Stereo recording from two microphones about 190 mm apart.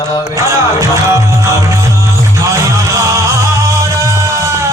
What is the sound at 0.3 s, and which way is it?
Music, 15° right (ahead or behind).